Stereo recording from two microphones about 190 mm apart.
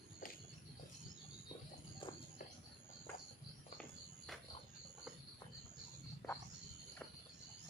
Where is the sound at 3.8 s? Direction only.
Centre (ahead or behind).